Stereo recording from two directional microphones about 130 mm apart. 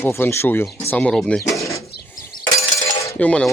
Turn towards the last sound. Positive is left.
turn(degrees=10)  # may be behind; listen again after turning